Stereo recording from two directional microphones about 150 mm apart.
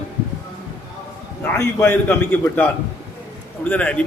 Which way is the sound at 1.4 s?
15° left (ahead or behind).